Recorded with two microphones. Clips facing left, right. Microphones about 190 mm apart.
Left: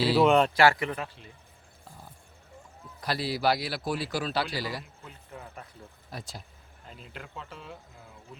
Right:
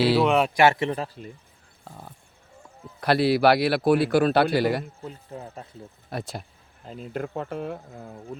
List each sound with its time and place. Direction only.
0.2 s speech: 5° right (ahead or behind)
0.5 s a man's voice: 20° right (ahead or behind)
1.8 s a sound: 65° right (ahead or behind)
3.0 s a man's voice: 65° right (ahead or behind)
5.0 s a man's voice: 25° right (ahead or behind)
6.1 s a man's voice: 60° right (ahead or behind)
6.8 s speech: 40° right (ahead or behind)